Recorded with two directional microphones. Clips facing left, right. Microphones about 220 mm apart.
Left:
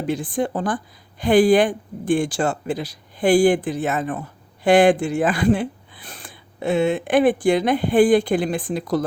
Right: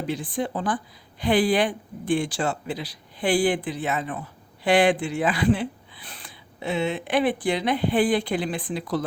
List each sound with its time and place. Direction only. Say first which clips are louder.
0.1 s speech: left 6 dB; 50° left (ahead or behind)